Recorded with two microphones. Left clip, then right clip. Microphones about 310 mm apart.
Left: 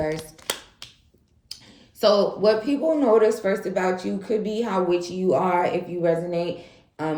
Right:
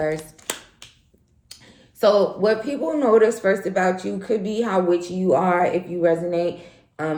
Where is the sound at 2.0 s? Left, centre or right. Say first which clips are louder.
Right 1 dB; centre.